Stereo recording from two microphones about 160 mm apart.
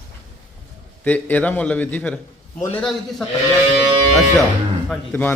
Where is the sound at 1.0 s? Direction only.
10° left (ahead or behind).